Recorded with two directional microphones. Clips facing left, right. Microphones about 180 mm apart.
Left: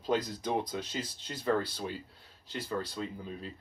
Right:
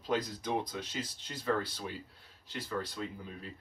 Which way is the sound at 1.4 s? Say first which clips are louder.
Left 3 dB; 30° left (ahead or behind).